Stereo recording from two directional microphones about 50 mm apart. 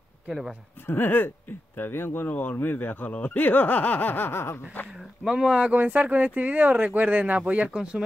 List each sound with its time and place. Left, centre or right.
0.3 s speech: centre
0.8 s speech: left
1.8 s speech: left
2.2 s speech: left
5.2 s speech: centre
5.7 s speech: right
7.7 s speech: centre